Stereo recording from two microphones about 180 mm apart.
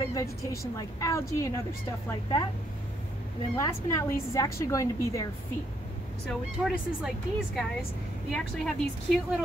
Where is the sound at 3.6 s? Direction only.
15° left (ahead or behind).